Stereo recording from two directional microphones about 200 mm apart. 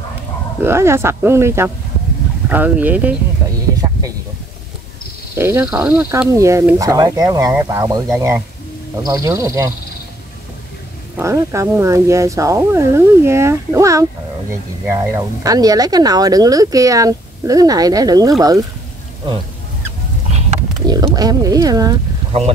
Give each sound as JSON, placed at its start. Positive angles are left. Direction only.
{"t": 0.7, "sound": "speech", "side_deg": -15}
{"t": 3.7, "sound": "a sound", "side_deg": -15}
{"t": 5.3, "sound": "speech", "side_deg": -15}
{"t": 11.1, "sound": "speech", "side_deg": -15}
{"t": 20.8, "sound": "speech", "side_deg": -20}